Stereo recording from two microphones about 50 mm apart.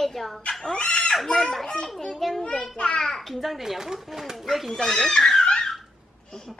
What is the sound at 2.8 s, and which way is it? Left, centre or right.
Speech, centre.